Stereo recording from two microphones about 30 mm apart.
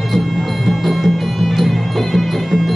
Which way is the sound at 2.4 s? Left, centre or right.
Centre.